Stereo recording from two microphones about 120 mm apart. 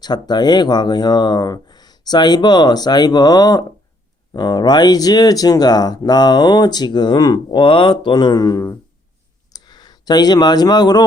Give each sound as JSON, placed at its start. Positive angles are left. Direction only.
{"t": 0.0, "sound": "speech", "side_deg": 35}